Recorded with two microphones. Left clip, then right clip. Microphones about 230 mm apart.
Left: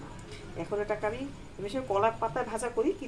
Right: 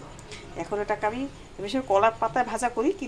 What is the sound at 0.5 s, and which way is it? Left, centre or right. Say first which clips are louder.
Speech: right 4 dB; centre.